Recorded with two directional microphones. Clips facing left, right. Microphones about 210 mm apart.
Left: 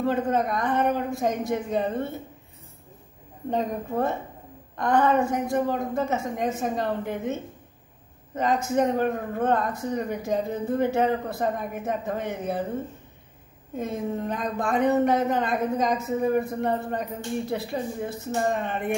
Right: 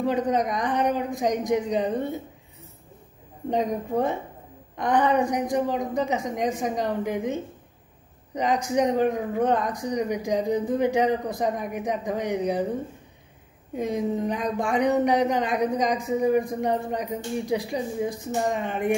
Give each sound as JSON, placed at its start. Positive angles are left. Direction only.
{"t": 0.0, "sound": "speech", "side_deg": -15}
{"t": 3.4, "sound": "speech", "side_deg": -15}
{"t": 8.4, "sound": "speech", "side_deg": -15}
{"t": 13.7, "sound": "speech", "side_deg": -15}